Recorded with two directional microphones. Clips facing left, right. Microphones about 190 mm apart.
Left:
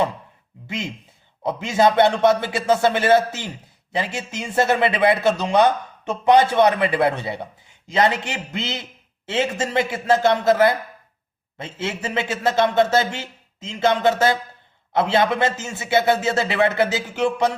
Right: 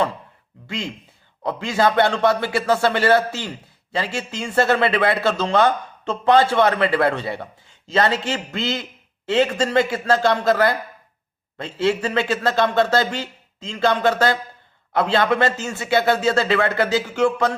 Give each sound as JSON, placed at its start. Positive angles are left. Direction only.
{"t": 0.7, "sound": "speech", "side_deg": 20}